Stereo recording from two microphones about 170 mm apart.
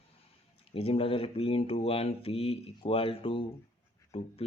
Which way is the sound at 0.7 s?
35° left (ahead or behind).